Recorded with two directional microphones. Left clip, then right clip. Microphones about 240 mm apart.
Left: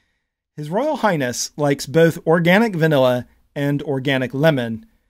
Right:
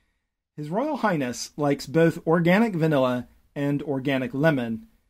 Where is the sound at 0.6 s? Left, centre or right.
Left.